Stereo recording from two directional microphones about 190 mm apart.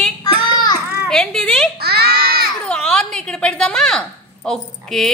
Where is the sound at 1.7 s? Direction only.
55° right (ahead or behind).